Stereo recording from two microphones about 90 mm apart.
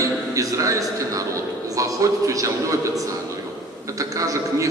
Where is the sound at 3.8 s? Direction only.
40° right (ahead or behind).